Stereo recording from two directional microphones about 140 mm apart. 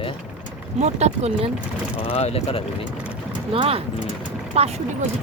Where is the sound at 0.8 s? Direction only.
55° right (ahead or behind).